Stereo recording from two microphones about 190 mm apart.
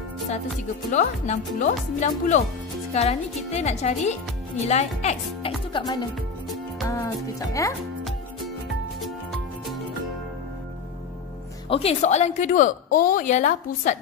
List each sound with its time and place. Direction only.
0.9 s a woman's voice: 40° left (ahead or behind)
5.7 s speech: 25° left (ahead or behind)
9.0 s music: centre (ahead or behind)
11.7 s a woman's voice: 30° left (ahead or behind)